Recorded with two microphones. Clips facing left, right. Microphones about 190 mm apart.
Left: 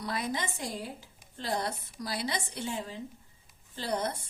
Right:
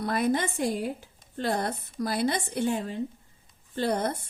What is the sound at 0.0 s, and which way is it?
Speech, 55° right (ahead or behind).